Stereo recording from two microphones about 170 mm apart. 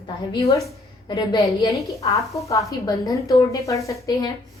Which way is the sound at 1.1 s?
25° left (ahead or behind).